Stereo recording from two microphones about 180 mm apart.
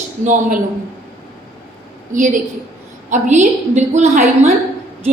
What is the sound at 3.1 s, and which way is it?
A woman's voice, 40° right (ahead or behind).